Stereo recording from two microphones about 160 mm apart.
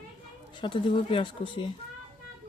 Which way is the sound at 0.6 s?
30° left (ahead or behind).